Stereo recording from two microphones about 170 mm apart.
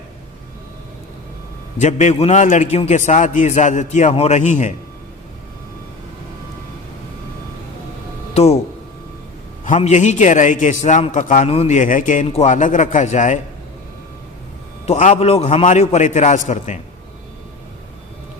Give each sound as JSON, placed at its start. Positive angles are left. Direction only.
{"t": 1.8, "sound": "a man's voice", "side_deg": 45}
{"t": 8.3, "sound": "a sound", "side_deg": 35}
{"t": 9.6, "sound": "a man's voice", "side_deg": 45}
{"t": 11.4, "sound": "a man's voice", "side_deg": 35}
{"t": 14.8, "sound": "a man's voice", "side_deg": 45}